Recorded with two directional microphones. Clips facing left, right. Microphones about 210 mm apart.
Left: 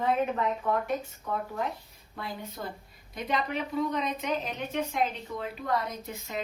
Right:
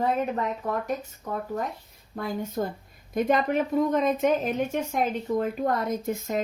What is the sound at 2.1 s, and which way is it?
A woman's voice, 45° right (ahead or behind).